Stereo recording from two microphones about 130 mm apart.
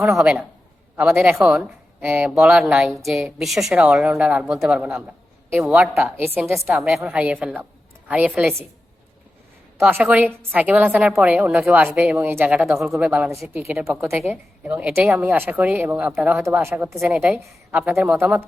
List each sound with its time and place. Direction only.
0.2 s a woman's voice: 5° right (ahead or behind)
5.9 s a woman's voice: 15° right (ahead or behind)
6.7 s a woman's voice: 5° right (ahead or behind)
9.9 s a woman's voice: 10° right (ahead or behind)
13.9 s a woman's voice: 5° right (ahead or behind)